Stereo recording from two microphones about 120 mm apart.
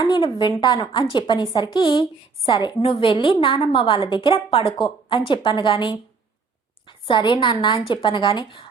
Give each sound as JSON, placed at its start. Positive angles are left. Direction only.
{"t": 0.0, "sound": "a woman's voice", "side_deg": 40}